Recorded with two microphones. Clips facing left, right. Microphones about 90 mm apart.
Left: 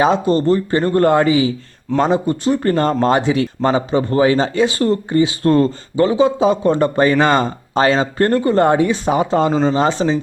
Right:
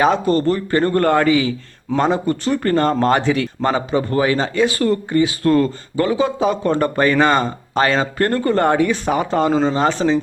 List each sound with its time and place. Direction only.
0.0 s speech: 25° left (ahead or behind)